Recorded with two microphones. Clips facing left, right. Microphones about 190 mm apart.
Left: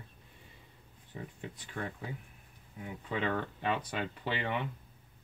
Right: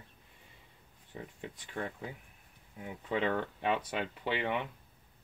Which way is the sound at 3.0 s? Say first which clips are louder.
Right 2 dB; 20° right (ahead or behind).